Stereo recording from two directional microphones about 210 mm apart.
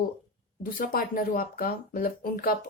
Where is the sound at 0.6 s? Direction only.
40° left (ahead or behind).